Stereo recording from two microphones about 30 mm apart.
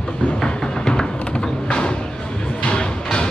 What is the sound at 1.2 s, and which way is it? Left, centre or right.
Music, left.